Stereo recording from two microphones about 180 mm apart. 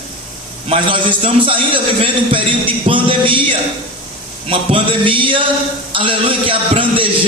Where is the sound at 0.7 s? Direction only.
30° right (ahead or behind).